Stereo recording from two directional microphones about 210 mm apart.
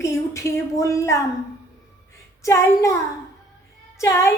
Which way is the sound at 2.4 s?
15° left (ahead or behind).